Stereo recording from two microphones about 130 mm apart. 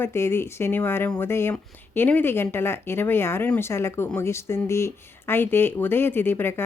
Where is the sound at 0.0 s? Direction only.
20° left (ahead or behind).